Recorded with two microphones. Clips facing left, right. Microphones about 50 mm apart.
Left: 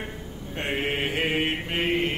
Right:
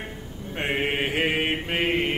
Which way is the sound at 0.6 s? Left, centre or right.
Centre.